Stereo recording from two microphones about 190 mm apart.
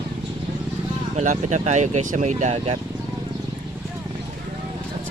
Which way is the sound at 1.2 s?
35° right (ahead or behind).